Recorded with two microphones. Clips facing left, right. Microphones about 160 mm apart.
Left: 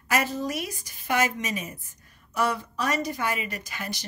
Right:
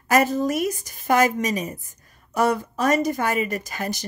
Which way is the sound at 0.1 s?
45° right (ahead or behind).